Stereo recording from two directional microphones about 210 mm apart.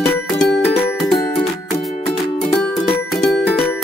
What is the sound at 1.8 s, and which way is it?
Music, centre (ahead or behind).